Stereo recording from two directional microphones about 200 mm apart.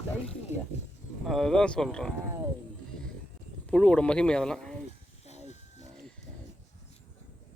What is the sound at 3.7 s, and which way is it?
Speech, 5° left (ahead or behind).